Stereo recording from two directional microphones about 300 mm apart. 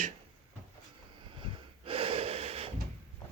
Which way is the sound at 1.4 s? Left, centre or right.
Centre.